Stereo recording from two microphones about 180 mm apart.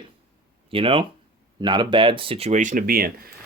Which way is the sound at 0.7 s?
30° right (ahead or behind).